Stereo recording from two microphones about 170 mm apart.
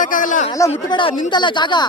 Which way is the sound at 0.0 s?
50° left (ahead or behind).